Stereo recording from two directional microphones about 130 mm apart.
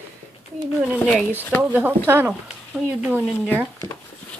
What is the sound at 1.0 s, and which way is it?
Speech, 5° left (ahead or behind).